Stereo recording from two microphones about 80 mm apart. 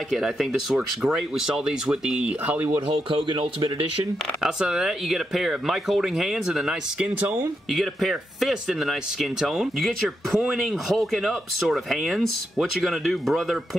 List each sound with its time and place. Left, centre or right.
0.1 s speech: centre
3.1 s speech: right
4.4 s speech: centre